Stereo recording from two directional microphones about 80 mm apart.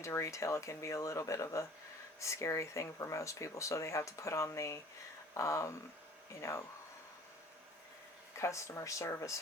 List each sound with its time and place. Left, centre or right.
0.0 s speech: left
8.4 s speech: left